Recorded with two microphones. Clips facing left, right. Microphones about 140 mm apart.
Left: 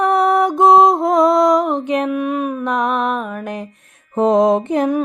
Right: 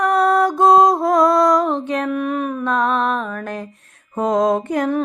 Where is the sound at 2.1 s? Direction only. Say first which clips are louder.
Left 2 dB; 5° left (ahead or behind); by 4.9 s 25° left (ahead or behind).